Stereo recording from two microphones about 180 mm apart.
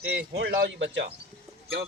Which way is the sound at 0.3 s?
70° right (ahead or behind).